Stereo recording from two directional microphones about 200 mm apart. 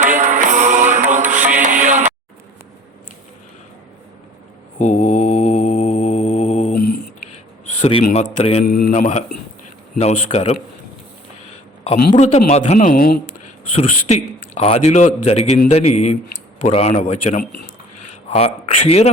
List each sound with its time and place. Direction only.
0.0 s music: 40° right (ahead or behind)
4.8 s mantra: 35° left (ahead or behind)
7.8 s a man's voice: 30° left (ahead or behind)
11.9 s a man's voice: 35° left (ahead or behind)
13.7 s a man's voice: 30° left (ahead or behind)